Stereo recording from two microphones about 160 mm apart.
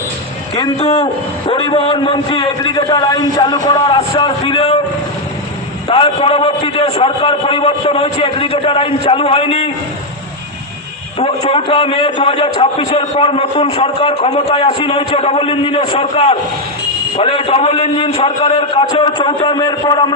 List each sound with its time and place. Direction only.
0.8 s a man's voice: 40° left (ahead or behind)
5.9 s a man's voice: 35° left (ahead or behind)
11.2 s a man's voice: 40° left (ahead or behind)